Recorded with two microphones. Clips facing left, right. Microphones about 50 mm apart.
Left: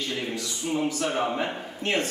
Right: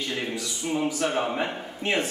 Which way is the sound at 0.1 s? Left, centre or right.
Centre.